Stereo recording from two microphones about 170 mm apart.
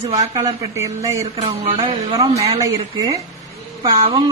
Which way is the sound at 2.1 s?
20° right (ahead or behind).